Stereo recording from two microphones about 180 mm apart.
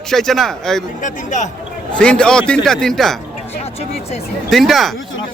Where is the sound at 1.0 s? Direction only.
45° left (ahead or behind).